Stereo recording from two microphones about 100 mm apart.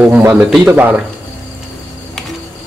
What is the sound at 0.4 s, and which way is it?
Speech, 5° right (ahead or behind).